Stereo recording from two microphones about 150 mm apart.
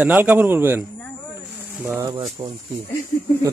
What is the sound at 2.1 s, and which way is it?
Speech, 30° right (ahead or behind).